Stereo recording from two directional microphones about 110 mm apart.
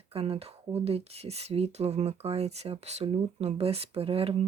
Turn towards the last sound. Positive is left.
turn(degrees=-60)  # may be behind; listen again after turning